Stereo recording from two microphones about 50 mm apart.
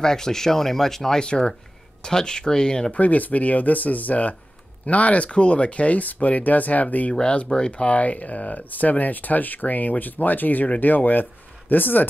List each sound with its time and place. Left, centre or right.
0.0 s speech: centre
2.9 s speech: left
7.2 s speech: centre; by 12.1 s left